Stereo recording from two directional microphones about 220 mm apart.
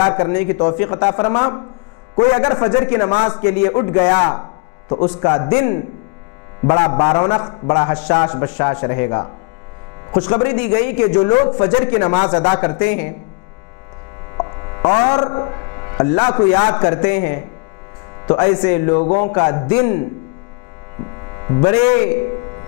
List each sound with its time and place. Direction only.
0.0 s a man's voice: 25° left (ahead or behind)
0.3 s a man's voice: 15° left (ahead or behind)
8.3 s a man's voice: 10° left (ahead or behind)
12.8 s a man's voice: 10° left (ahead or behind)
14.3 s mains hum: 20° left (ahead or behind)
15.1 s a man's voice: 20° left (ahead or behind)
18.9 s speech: 35° left (ahead or behind)
19.2 s a man's voice: 15° left (ahead or behind)
21.3 s speech: 20° left (ahead or behind)